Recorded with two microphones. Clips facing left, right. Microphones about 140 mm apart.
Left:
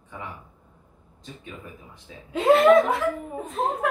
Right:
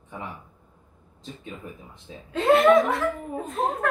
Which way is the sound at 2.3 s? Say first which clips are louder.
Left 1 dB; centre (ahead or behind).